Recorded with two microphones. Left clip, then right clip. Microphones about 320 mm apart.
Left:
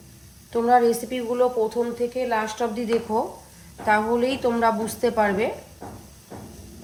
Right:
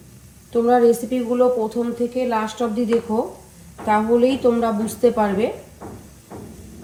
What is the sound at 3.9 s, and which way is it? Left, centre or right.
Speech, left.